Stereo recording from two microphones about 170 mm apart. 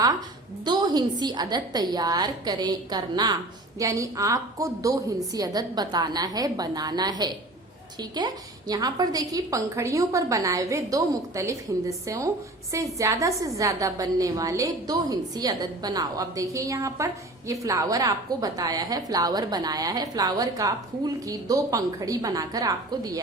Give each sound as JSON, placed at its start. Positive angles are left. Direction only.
{"t": 0.6, "sound": "a woman's voice", "side_deg": -25}